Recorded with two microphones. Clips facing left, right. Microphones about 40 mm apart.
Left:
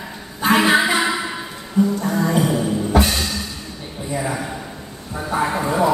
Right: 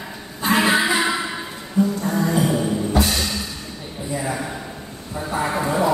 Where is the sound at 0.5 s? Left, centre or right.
Left.